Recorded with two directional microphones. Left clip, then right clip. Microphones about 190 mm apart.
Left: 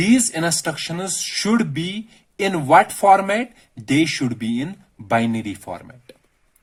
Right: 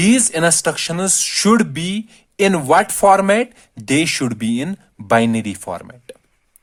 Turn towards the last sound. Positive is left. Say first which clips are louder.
# right 5 dB
turn(degrees=-60)  # may be behind; listen again after turning